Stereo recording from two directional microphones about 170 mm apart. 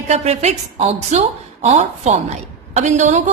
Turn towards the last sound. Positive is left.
turn(degrees=-45)  # may be behind; listen again after turning